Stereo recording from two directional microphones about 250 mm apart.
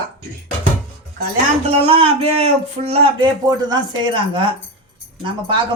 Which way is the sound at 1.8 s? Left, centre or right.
Right.